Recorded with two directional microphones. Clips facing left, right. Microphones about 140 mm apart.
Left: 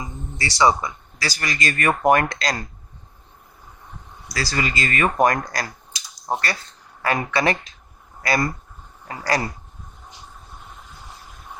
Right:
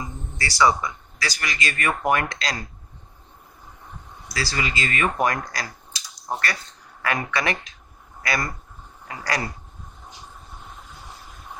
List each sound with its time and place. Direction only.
0.0 s a sound: 25° left (ahead or behind)
1.4 s speech: 40° left (ahead or behind)
4.4 s speech: 45° left (ahead or behind)
7.0 s speech: 30° left (ahead or behind)